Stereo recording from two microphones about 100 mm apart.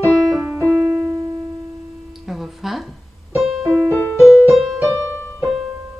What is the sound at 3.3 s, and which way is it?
Piano, 5° right (ahead or behind).